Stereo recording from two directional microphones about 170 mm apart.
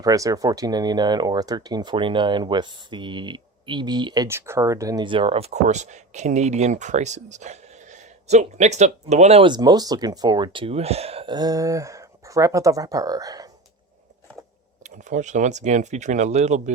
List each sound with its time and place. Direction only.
0.0 s speech: 20° right (ahead or behind)
14.8 s speech: 45° right (ahead or behind)